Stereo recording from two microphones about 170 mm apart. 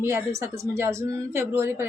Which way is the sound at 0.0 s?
15° right (ahead or behind).